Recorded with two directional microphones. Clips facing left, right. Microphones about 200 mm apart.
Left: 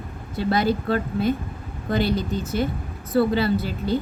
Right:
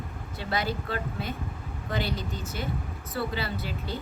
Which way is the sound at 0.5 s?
40° left (ahead or behind).